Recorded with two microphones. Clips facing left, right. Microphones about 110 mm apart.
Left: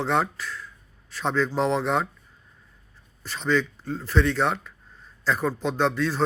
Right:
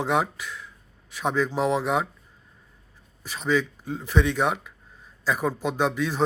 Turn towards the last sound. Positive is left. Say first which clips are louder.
# left 1 dB
turn(degrees=-15)  # may be behind; listen again after turning